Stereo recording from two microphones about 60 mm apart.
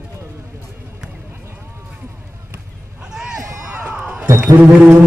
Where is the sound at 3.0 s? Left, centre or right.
Centre.